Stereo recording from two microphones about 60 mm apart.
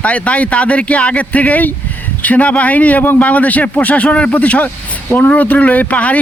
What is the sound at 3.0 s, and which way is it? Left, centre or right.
Speech, left.